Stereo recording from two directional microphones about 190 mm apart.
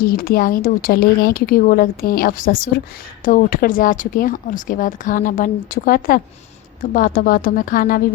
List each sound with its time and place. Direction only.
0.0 s speech: 50° left (ahead or behind)